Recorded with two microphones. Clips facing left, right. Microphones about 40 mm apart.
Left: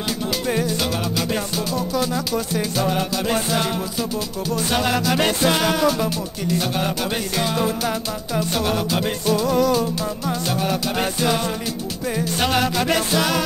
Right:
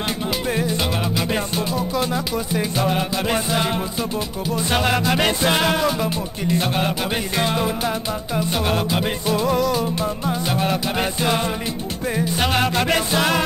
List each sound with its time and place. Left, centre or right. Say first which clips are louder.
2.3 s music: even; centre
4.7 s music: right 1 dB; centre
7.3 s music: right 1 dB; right
8.4 s music: even; centre